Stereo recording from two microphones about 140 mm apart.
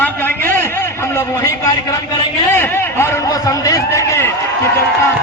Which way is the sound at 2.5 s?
15° left (ahead or behind).